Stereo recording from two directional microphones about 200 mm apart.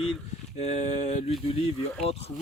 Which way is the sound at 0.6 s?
35° left (ahead or behind).